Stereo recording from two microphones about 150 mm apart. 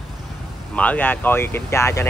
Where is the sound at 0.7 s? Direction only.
10° left (ahead or behind).